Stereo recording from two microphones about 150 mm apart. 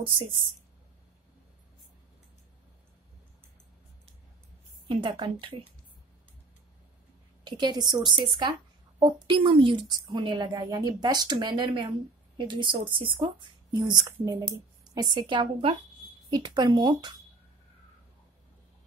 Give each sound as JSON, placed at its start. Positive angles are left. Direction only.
{"t": 4.8, "sound": "speech", "side_deg": -30}
{"t": 7.4, "sound": "a woman's voice", "side_deg": -30}